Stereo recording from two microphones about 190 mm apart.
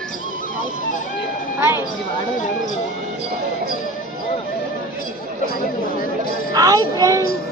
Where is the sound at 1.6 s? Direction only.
10° right (ahead or behind).